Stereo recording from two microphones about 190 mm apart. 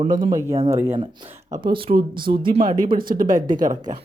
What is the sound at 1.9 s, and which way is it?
Speech, 50° right (ahead or behind).